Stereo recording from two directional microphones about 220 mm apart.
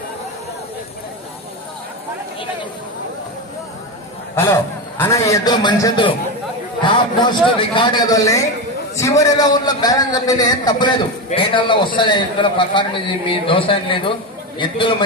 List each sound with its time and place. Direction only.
4.4 s a man's voice: 10° left (ahead or behind)